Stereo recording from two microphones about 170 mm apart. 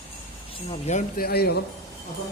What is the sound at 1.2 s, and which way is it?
Speech, 65° left (ahead or behind).